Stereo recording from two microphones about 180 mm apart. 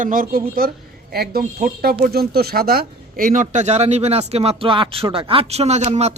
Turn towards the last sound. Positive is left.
turn(degrees=-35)  # may be behind; listen again after turning